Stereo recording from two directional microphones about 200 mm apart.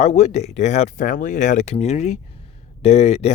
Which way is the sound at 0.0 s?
35° left (ahead or behind).